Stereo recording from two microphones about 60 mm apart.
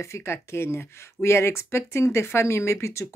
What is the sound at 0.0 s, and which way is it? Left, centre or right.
Speech, left.